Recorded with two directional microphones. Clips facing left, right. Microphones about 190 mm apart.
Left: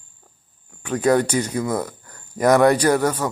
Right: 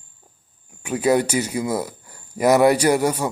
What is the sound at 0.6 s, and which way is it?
Speech, 10° right (ahead or behind).